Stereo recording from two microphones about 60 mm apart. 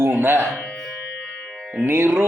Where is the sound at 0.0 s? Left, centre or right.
Right.